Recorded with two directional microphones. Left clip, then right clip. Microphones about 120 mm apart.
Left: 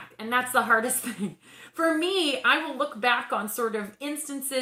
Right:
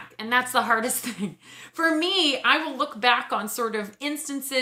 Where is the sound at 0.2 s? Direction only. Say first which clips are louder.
Right 2 dB; 20° right (ahead or behind).